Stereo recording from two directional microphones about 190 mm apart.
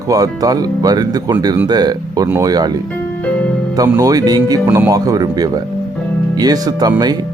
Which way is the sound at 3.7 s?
20° right (ahead or behind).